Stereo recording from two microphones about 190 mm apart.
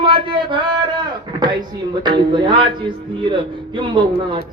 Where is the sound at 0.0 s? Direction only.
25° right (ahead or behind).